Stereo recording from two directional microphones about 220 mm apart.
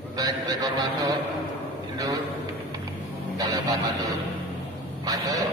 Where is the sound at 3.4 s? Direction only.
15° right (ahead or behind).